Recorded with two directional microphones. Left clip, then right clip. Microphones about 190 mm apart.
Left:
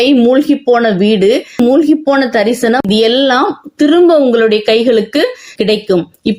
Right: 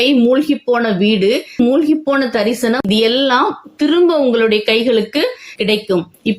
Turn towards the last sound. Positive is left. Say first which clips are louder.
# left 4 dB
turn(degrees=25)  # may be behind; listen again after turning